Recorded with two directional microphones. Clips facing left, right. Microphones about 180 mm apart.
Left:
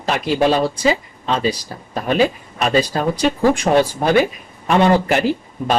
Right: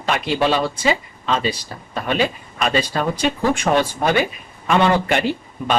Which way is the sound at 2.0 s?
40° left (ahead or behind).